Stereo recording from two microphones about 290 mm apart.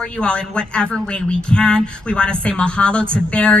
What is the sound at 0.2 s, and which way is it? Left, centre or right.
A woman's voice, centre.